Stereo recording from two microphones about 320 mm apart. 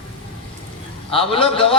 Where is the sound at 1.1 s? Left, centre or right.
Centre.